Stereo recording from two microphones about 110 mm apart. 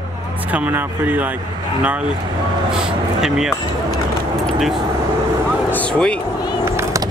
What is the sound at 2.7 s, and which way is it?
Speech, 5° right (ahead or behind).